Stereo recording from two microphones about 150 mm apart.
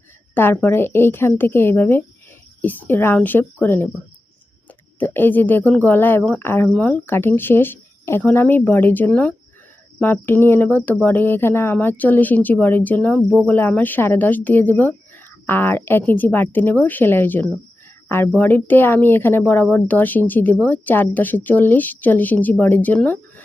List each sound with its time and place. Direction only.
0.3 s speech: 15° left (ahead or behind)
4.9 s speech: 15° left (ahead or behind)